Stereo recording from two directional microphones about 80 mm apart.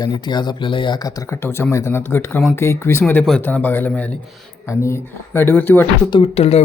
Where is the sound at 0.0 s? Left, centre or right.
Left.